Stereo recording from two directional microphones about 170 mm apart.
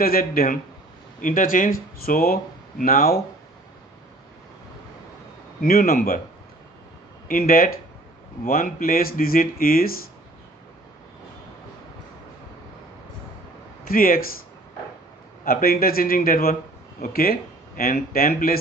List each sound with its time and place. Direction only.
0.0 s speech: 60° left (ahead or behind)
5.6 s speech: 60° left (ahead or behind)
7.2 s speech: 55° left (ahead or behind)
13.8 s speech: 55° left (ahead or behind)
15.4 s speech: 60° left (ahead or behind)